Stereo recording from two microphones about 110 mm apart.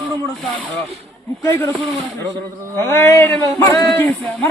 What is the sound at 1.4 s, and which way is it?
Speech, 25° left (ahead or behind).